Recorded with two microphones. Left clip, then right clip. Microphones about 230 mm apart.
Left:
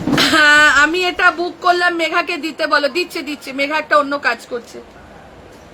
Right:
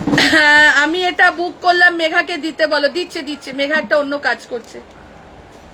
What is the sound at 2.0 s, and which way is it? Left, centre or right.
Speech, left.